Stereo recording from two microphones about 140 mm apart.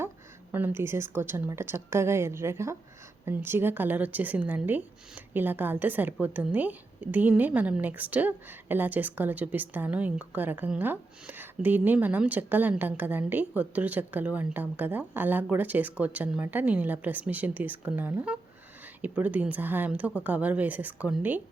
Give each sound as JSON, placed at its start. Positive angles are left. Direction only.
{"t": 0.5, "sound": "speech", "side_deg": -15}